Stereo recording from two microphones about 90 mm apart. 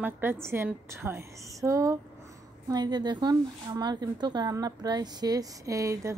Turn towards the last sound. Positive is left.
turn(degrees=-35)  # may be behind; listen again after turning